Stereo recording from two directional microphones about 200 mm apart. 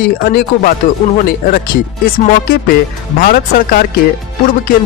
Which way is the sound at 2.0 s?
45° left (ahead or behind).